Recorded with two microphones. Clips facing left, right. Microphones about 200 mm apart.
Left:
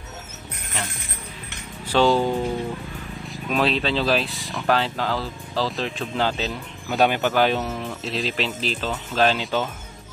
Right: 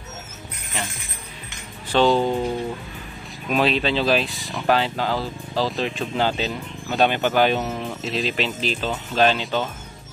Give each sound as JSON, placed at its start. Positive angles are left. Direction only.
{"t": 1.9, "sound": "speech", "side_deg": 5}
{"t": 3.4, "sound": "speech", "side_deg": 0}